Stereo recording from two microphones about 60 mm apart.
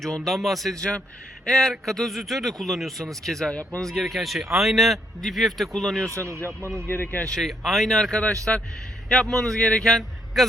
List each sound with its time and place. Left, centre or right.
0.0 s speech: centre
0.8 s a man's voice: centre
3.5 s speech: left
3.8 s speech: centre
6.1 s a man's voice: right
6.8 s speech: left
7.3 s speech: centre
8.5 s speech: left
9.4 s speech: centre